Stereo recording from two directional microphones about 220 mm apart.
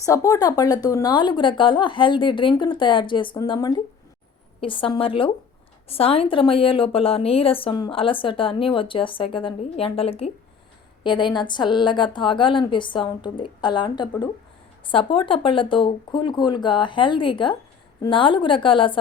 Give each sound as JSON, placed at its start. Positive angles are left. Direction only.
{"t": 0.0, "sound": "a woman's voice", "side_deg": 15}